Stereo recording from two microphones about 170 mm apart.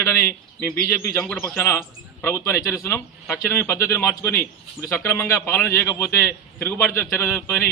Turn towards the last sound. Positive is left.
turn(degrees=15)  # may be behind; listen again after turning